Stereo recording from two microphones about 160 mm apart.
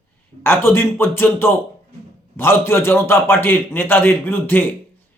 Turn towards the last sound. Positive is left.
turn(degrees=15)  # may be behind; listen again after turning